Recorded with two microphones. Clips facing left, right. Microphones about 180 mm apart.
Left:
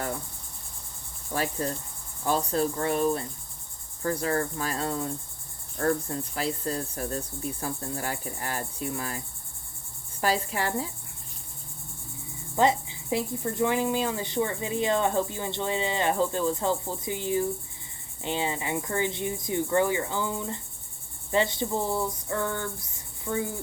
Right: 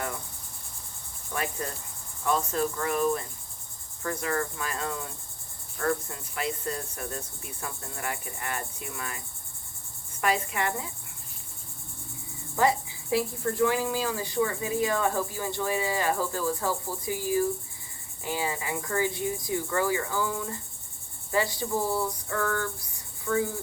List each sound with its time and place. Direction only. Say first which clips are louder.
1.3 s cricket: left 4 dB; 35° left (ahead or behind)
12.5 s speech: left 2 dB; 20° left (ahead or behind)